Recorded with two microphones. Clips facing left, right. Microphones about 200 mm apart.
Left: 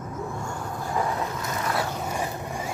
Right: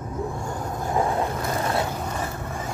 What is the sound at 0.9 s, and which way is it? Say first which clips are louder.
Vehicle: right 4 dB; 25° right (ahead or behind).